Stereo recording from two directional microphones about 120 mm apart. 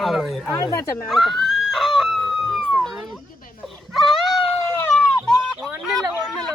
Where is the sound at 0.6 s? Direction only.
25° left (ahead or behind).